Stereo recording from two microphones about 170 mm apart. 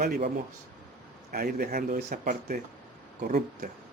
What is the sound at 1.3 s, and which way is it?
Speech, 60° right (ahead or behind).